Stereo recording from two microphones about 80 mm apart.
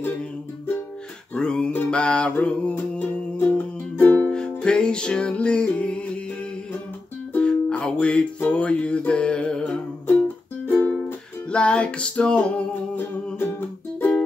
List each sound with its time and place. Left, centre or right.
1.3 s music: centre
7.3 s music: centre